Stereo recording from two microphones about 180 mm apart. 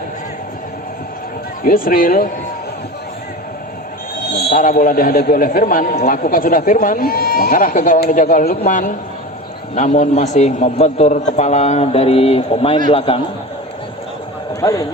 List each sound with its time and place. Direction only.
1.6 s a man's voice: 50° left (ahead or behind)
4.4 s a man's voice: 50° left (ahead or behind); by 13.2 s 30° left (ahead or behind)
14.6 s speech: 20° left (ahead or behind)